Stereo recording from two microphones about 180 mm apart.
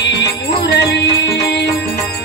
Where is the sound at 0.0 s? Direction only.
75° left (ahead or behind).